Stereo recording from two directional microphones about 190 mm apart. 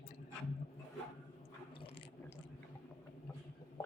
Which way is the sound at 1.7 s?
30° left (ahead or behind).